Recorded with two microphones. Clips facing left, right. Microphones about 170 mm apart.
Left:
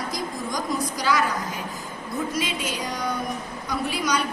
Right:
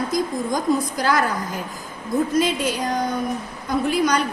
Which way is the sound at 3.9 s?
55° right (ahead or behind).